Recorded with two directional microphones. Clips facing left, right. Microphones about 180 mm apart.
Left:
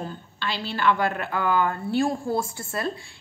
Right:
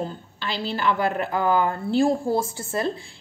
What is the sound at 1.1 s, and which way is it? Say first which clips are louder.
A woman's voice: right 3 dB; 35° right (ahead or behind).